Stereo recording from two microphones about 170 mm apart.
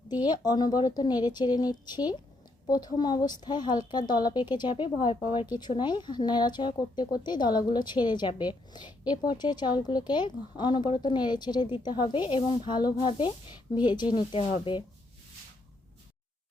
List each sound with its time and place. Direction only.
0.1 s a woman's voice: 25° left (ahead or behind)